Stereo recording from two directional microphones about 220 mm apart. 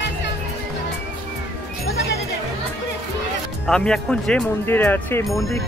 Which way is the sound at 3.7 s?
5° left (ahead or behind).